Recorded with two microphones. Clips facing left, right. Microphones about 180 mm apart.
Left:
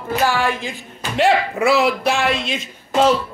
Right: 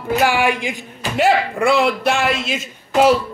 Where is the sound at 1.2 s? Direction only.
Centre (ahead or behind).